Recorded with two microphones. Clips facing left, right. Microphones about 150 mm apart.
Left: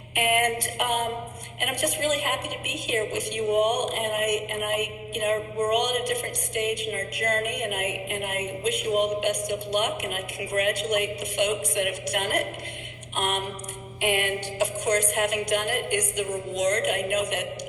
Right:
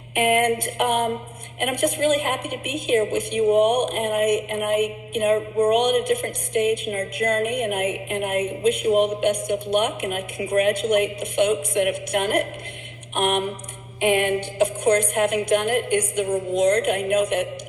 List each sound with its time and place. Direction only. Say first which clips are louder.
0.1 s a woman's voice: right 5 dB; 50° right (ahead or behind)
13.1 s a sound: right 6 dB; 55° right (ahead or behind)
14.0 s a woman's voice: right 6 dB; 50° right (ahead or behind)